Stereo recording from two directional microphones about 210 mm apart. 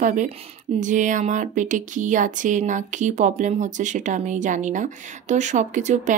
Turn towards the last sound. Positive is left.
turn(degrees=-35)  # may be behind; listen again after turning